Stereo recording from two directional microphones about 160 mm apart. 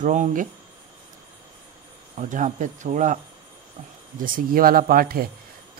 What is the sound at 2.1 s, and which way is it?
Speech, 50° right (ahead or behind).